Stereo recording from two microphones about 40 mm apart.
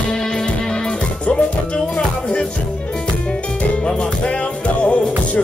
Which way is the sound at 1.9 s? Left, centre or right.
Left.